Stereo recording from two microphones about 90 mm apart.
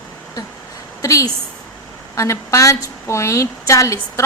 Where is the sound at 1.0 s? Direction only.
40° left (ahead or behind).